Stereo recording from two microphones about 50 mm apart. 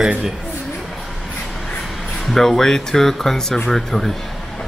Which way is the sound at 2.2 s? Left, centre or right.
Centre.